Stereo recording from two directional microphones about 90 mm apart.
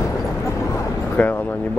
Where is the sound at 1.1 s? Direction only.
15° left (ahead or behind).